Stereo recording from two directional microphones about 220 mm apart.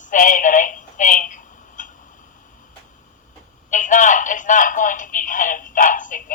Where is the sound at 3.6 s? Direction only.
35° left (ahead or behind).